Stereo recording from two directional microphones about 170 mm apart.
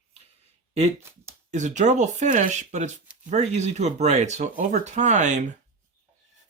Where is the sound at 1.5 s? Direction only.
45° right (ahead or behind).